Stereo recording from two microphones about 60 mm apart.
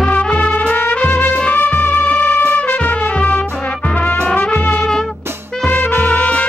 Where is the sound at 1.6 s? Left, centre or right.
Left.